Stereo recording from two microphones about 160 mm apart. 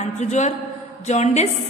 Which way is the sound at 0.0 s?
45° left (ahead or behind).